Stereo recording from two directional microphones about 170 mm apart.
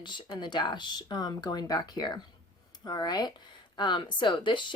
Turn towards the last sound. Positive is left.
turn(degrees=30)  # may be behind; listen again after turning